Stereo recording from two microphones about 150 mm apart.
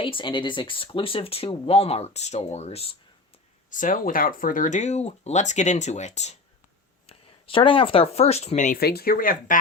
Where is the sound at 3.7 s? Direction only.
60° left (ahead or behind).